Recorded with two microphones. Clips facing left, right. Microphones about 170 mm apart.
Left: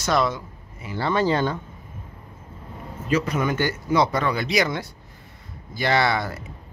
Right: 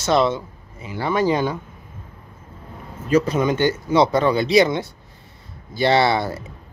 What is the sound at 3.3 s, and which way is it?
Speech, 20° right (ahead or behind).